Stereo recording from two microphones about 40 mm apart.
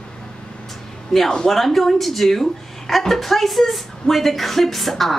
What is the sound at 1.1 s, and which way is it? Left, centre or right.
A man's voice, centre.